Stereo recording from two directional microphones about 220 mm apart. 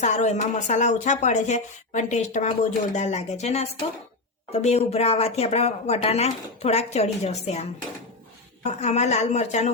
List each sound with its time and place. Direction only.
0.0 s speech: 30° left (ahead or behind)